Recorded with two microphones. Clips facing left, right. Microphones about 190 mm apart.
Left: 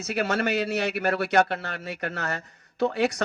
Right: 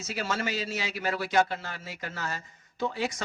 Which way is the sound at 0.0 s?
60° left (ahead or behind).